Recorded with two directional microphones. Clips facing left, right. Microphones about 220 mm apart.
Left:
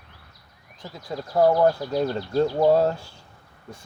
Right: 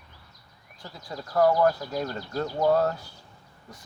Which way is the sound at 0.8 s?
20° left (ahead or behind).